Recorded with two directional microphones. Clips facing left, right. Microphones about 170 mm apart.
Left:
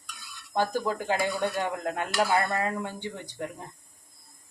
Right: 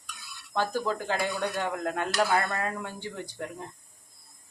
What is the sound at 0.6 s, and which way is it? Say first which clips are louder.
Speech: left 1 dB; 15° left (ahead or behind).